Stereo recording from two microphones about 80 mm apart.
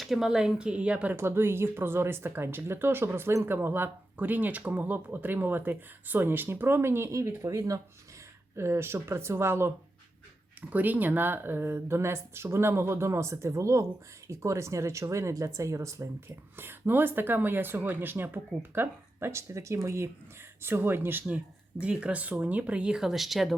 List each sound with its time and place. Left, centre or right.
0.0 s speech: centre
1.1 s speech: right
10.7 s speech: right
16.6 s speech: right; by 23.6 s centre